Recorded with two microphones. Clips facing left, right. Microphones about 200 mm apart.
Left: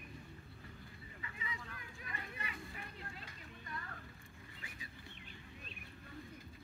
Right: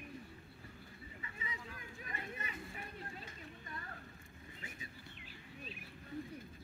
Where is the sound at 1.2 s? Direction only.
25° right (ahead or behind).